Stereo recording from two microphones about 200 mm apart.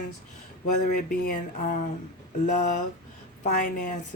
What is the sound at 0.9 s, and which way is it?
Speech, 45° left (ahead or behind).